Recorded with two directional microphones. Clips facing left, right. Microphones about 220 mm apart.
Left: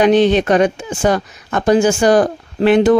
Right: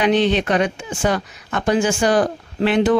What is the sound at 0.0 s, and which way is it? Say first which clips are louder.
Speech: left 5 dB; 45° left (ahead or behind).